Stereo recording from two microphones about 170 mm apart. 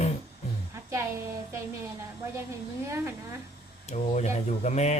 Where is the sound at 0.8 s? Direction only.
15° right (ahead or behind).